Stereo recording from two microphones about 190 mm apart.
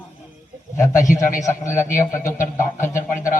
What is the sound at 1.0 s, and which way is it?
Speech, 45° left (ahead or behind).